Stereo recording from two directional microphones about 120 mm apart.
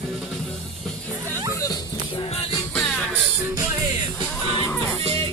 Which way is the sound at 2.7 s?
Centre (ahead or behind).